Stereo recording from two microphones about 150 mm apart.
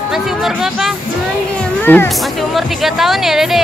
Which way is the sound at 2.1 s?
Centre (ahead or behind).